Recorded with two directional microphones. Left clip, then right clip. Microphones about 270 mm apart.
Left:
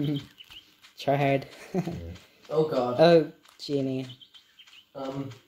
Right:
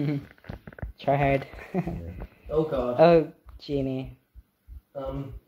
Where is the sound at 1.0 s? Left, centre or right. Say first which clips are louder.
Right 1 dB; centre.